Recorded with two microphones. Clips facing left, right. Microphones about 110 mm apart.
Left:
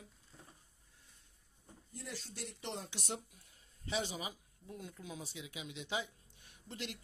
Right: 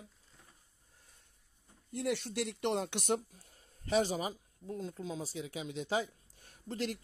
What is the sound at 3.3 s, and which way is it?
Speech, 45° right (ahead or behind).